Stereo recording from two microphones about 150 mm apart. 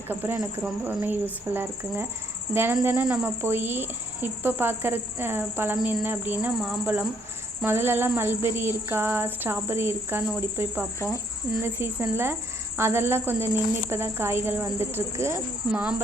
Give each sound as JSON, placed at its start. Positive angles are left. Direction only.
{"t": 0.1, "sound": "speech", "side_deg": -15}